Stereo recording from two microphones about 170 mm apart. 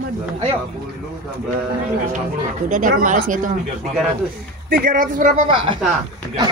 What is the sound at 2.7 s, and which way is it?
Speech, 50° right (ahead or behind).